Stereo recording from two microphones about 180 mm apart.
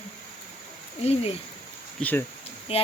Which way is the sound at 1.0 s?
35° left (ahead or behind).